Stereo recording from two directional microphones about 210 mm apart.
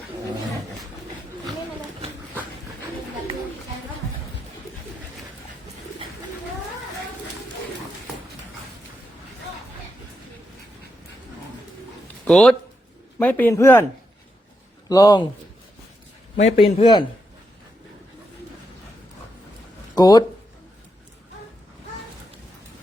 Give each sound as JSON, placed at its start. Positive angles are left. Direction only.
{"t": 12.0, "sound": "a sound", "side_deg": 5}
{"t": 13.1, "sound": "a man's voice", "side_deg": 10}
{"t": 14.8, "sound": "speech", "side_deg": 20}
{"t": 16.4, "sound": "a man's voice", "side_deg": 30}
{"t": 20.0, "sound": "a man's voice", "side_deg": 20}